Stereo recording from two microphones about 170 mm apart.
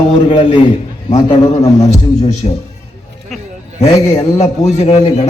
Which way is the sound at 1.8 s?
40° left (ahead or behind).